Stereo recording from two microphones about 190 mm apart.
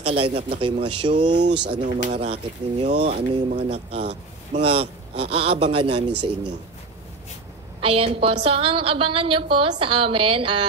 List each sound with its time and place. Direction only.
0.0 s a man's voice: 30° right (ahead or behind)
1.4 s speech: 65° right (ahead or behind)
2.0 s a man's voice: 30° right (ahead or behind)
7.8 s a woman's voice: 30° right (ahead or behind)